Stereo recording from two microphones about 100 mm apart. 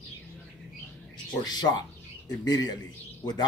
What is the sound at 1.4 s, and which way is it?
Speech, 40° left (ahead or behind).